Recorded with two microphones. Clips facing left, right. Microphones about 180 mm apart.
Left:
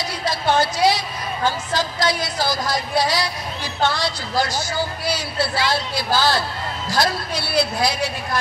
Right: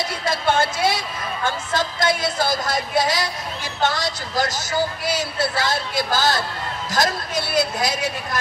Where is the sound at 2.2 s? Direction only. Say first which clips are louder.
Right 1 dB; 50° right (ahead or behind).